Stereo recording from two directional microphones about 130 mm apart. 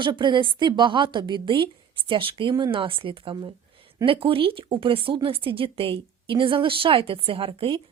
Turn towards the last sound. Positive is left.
turn(degrees=-40)  # may be behind; listen again after turning